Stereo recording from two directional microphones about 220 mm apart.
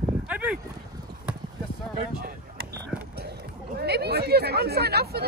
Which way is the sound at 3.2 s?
45° right (ahead or behind).